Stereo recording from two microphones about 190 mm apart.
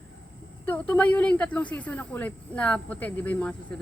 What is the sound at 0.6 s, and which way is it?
Speech, 10° left (ahead or behind).